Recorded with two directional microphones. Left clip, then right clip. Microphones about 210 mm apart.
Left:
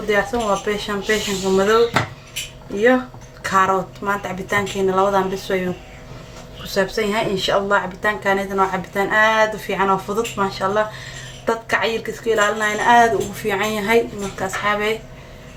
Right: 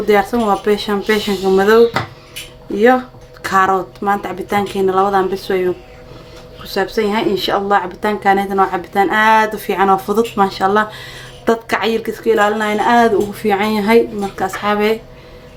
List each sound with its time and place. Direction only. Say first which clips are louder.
0.1 s speech: right 5 dB; 45° right (ahead or behind)
3.4 s a woman's voice: right 3 dB; 35° right (ahead or behind)
6.7 s a woman's voice: right 3 dB; 35° right (ahead or behind)